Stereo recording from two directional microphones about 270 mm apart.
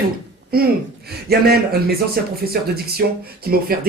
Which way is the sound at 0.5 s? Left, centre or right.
Right.